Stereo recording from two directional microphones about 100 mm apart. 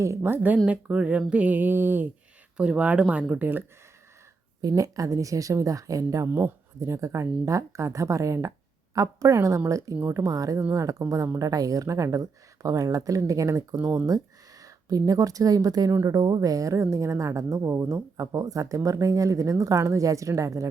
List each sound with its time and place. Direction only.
0.0 s speech: 25° right (ahead or behind)
4.6 s a woman's voice: 35° right (ahead or behind)
10.6 s a woman's voice: 25° right (ahead or behind)